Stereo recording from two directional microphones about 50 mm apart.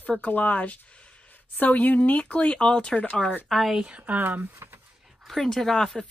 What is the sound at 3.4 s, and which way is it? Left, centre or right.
Speech, centre.